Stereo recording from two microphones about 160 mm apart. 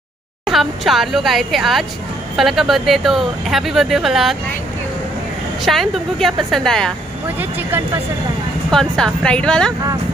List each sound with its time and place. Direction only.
0.5 s speech: centre (ahead or behind)
5.7 s speech: centre (ahead or behind)
8.6 s speech: 5° left (ahead or behind)